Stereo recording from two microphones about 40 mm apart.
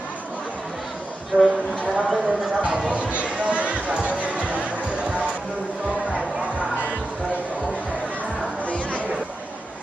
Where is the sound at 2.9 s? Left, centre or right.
Right.